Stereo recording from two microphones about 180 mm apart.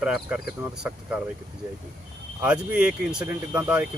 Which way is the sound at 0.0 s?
5° right (ahead or behind).